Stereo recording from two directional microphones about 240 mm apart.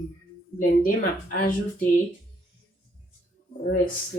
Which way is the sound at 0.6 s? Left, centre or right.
Left.